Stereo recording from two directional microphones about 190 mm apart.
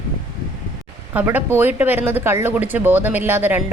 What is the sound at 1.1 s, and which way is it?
Speech, 10° right (ahead or behind).